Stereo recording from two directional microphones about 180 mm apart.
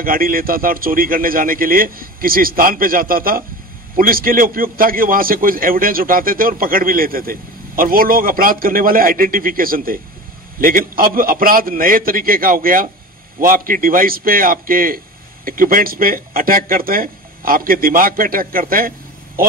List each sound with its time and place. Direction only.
0.0 s a man's voice: 50° right (ahead or behind)